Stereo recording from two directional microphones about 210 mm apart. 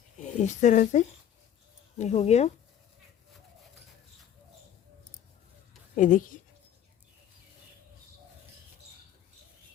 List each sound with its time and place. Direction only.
0.2 s speech: 35° left (ahead or behind)
6.0 s speech: 40° left (ahead or behind)